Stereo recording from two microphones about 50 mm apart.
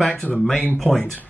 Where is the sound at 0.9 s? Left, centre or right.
Left.